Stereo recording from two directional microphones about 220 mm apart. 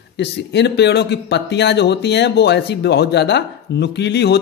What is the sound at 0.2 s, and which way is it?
Speech, 50° left (ahead or behind).